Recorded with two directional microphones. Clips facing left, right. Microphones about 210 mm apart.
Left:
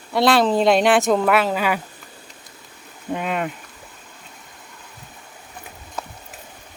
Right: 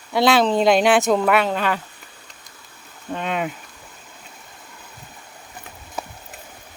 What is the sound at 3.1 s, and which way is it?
Speech, 5° left (ahead or behind).